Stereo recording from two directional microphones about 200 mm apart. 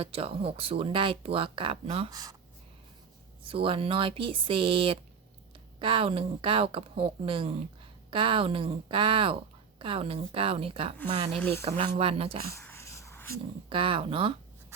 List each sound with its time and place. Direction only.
0.0 s a woman's voice: 30° right (ahead or behind)
3.4 s a woman's voice: 25° right (ahead or behind)
12.5 s a sound: 15° left (ahead or behind)
13.7 s a woman's voice: 25° right (ahead or behind)